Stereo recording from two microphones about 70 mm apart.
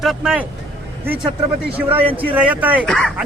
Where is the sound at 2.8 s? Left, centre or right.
Centre.